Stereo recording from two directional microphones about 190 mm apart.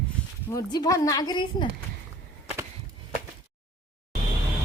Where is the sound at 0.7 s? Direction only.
20° left (ahead or behind).